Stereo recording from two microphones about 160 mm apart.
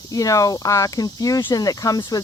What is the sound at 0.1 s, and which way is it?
Speech, 20° left (ahead or behind).